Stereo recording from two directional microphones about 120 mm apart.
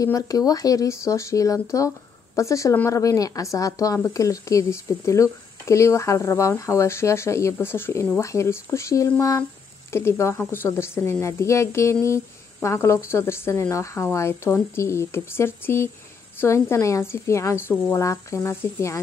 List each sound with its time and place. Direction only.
0.0 s a woman's voice: 30° left (ahead or behind)